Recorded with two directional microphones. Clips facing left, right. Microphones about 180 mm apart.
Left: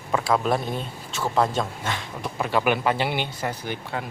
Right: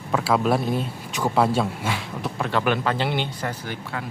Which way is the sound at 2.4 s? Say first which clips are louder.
Left 1 dB; 5° left (ahead or behind).